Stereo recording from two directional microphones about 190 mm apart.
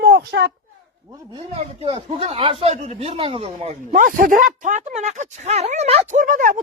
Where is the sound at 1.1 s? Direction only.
25° right (ahead or behind).